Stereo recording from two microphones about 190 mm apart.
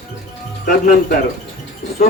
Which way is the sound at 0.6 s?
45° left (ahead or behind).